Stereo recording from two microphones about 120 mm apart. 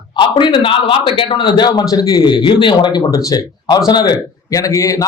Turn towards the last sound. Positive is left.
turn(degrees=25)  # may be behind; listen again after turning